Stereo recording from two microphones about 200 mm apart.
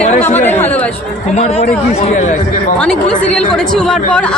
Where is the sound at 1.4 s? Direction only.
35° left (ahead or behind).